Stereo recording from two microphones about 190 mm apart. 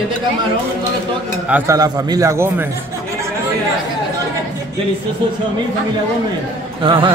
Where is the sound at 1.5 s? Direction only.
15° right (ahead or behind).